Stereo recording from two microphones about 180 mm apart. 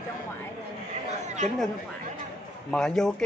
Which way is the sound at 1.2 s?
40° right (ahead or behind).